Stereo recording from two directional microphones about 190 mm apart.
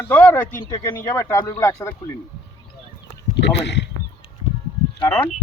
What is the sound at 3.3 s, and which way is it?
Speech, 65° left (ahead or behind).